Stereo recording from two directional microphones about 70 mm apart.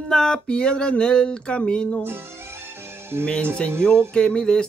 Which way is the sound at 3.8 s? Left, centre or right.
Centre.